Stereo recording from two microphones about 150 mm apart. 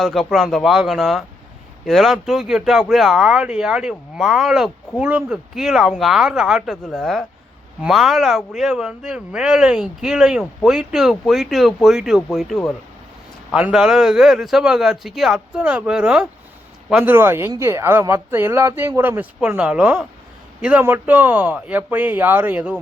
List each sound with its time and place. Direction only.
0.0 s speech: centre (ahead or behind)
17.1 s speech: 15° right (ahead or behind)